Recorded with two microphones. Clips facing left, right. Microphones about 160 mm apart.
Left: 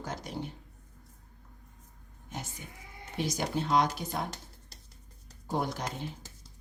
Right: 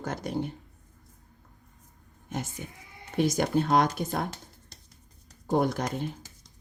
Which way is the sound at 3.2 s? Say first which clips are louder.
Right 7 dB; 50° right (ahead or behind).